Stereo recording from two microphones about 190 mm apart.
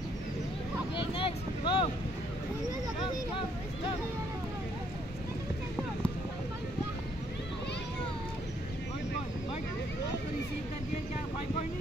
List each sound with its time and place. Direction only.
0.9 s boat: 25° left (ahead or behind)